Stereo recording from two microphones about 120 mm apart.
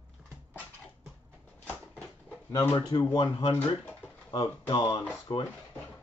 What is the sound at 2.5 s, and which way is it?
Speech, 30° left (ahead or behind).